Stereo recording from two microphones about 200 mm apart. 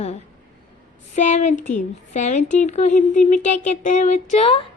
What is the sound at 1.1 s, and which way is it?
A woman's voice, 35° left (ahead or behind).